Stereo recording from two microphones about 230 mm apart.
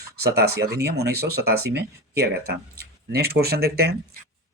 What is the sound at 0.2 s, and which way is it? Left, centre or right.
Speech, right.